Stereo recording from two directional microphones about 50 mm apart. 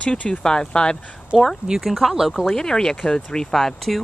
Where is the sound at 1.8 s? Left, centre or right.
Centre.